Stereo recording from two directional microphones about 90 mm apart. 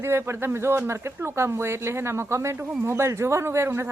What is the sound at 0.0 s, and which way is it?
Speech, 30° right (ahead or behind).